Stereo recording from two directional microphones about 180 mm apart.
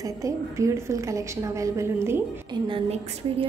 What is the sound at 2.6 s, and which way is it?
Speech, 30° right (ahead or behind).